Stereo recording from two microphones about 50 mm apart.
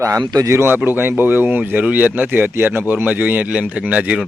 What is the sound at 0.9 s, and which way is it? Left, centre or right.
Speech, right.